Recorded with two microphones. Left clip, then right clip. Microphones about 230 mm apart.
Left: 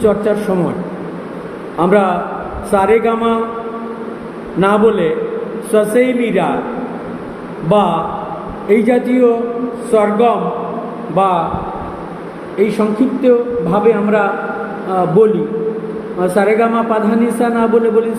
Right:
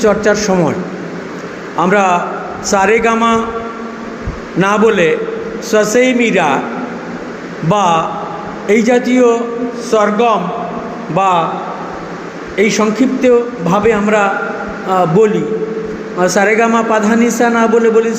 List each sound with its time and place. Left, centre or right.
0.0 s a man's voice: right
1.8 s a man's voice: right
4.6 s a man's voice: right
7.7 s a man's voice: right
12.5 s a man's voice: right
16.2 s a man's voice: right